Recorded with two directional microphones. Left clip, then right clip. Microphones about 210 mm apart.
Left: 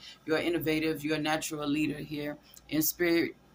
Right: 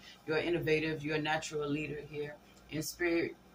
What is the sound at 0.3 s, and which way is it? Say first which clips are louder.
Speech: left 2 dB; 65° left (ahead or behind).